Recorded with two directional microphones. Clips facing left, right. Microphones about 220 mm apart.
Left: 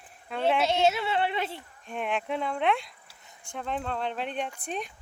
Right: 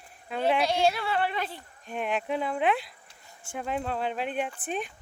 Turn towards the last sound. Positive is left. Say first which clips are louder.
# right 2 dB
turn(degrees=-5)  # may be behind; listen again after turning